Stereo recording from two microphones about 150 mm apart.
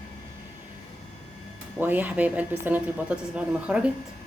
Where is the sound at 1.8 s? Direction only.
10° right (ahead or behind).